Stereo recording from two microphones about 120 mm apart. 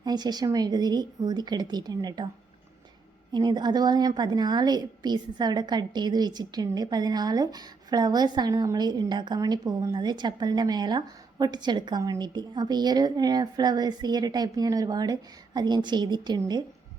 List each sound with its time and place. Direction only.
0.0 s a woman's voice: 35° right (ahead or behind)
3.3 s a woman's voice: 35° right (ahead or behind)